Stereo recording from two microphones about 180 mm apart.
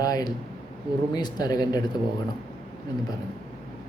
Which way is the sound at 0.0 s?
20° left (ahead or behind).